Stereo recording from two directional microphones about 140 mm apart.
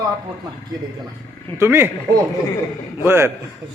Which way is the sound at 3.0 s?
15° right (ahead or behind).